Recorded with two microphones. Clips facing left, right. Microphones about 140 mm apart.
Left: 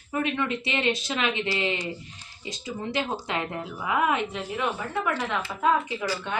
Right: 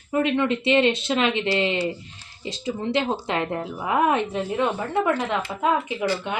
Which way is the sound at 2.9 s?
25° right (ahead or behind).